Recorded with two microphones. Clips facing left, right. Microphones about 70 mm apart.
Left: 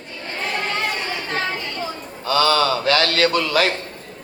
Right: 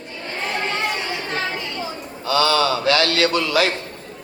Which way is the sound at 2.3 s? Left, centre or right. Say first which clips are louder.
Left 1 dB; left.